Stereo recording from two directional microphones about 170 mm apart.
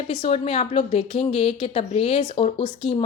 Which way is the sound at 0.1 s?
35° left (ahead or behind).